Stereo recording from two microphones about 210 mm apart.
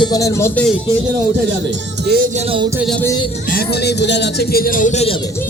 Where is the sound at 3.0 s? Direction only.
15° left (ahead or behind).